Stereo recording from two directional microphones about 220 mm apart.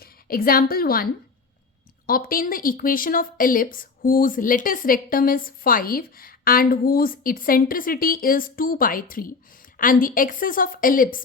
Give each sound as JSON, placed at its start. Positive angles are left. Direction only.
{"t": 0.0, "sound": "a woman's voice", "side_deg": 40}
{"t": 2.0, "sound": "speech", "side_deg": 40}